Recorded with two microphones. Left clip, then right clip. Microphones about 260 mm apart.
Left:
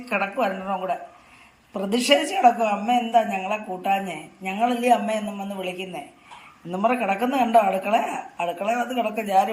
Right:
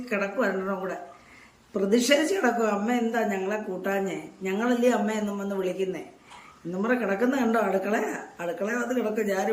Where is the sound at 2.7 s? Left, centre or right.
Right.